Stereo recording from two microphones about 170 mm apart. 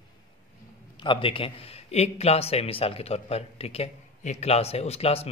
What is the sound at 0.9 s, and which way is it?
A man's voice, 30° left (ahead or behind).